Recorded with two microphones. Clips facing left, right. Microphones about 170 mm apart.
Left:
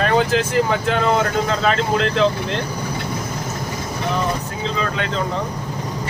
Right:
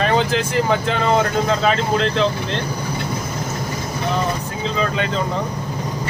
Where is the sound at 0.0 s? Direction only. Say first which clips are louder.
Left 1 dB; 5° left (ahead or behind).